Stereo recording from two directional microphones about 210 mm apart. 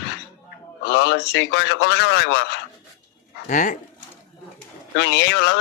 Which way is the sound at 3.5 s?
40° left (ahead or behind).